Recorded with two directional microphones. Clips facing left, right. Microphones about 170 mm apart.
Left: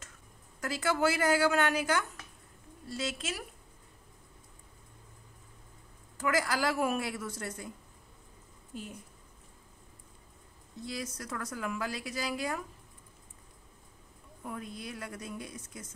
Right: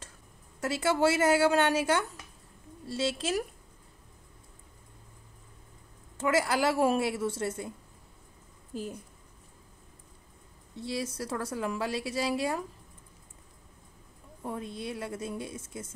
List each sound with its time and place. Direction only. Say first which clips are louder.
0.6 s a woman's voice: right 4 dB; 25° right (ahead or behind)
6.1 s a woman's voice: right 4 dB; 25° right (ahead or behind)
8.7 s speech: right 6 dB; 35° right (ahead or behind)
10.8 s a woman's voice: right 5 dB; 30° right (ahead or behind)
14.4 s a woman's voice: right 5 dB; 25° right (ahead or behind)